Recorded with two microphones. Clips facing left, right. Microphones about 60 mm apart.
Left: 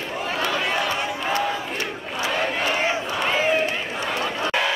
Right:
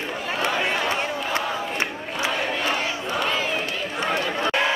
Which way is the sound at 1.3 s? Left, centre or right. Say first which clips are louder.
Even; right.